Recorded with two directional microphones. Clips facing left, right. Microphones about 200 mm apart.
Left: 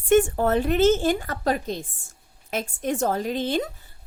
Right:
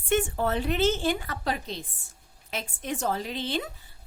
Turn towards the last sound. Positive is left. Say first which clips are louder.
# left 6 dB
turn(degrees=45)  # may be behind; listen again after turning